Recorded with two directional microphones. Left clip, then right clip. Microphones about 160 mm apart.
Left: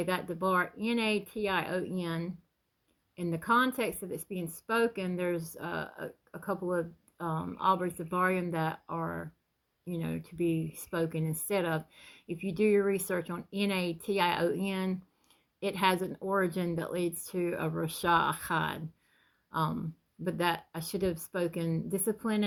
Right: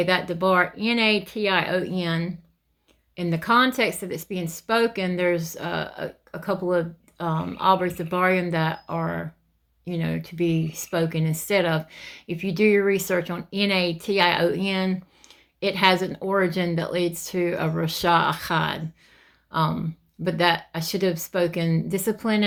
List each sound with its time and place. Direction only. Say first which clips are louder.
0.0 s speech: right 10 dB; 40° left (ahead or behind)